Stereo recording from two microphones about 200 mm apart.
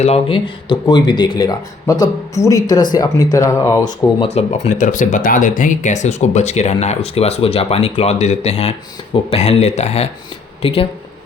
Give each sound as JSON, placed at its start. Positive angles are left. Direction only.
{"t": 0.0, "sound": "speech", "side_deg": 30}
{"t": 4.3, "sound": "speech", "side_deg": 30}